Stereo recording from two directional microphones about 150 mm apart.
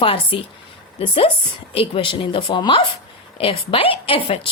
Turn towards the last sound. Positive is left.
turn(degrees=40)  # may be behind; listen again after turning